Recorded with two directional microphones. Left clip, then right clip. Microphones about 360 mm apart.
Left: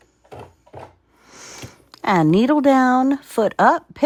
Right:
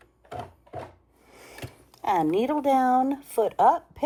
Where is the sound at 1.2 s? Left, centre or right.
Left.